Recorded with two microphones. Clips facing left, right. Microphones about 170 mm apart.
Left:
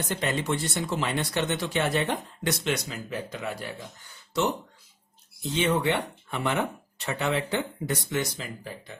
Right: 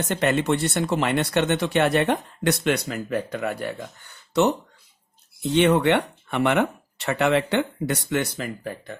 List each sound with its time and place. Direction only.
0.0 s speech: 70° right (ahead or behind)